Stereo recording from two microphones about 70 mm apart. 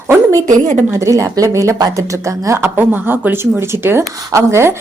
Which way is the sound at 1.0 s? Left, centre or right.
Right.